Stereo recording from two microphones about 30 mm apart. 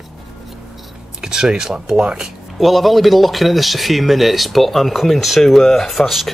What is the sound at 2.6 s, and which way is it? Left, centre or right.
Speech, centre.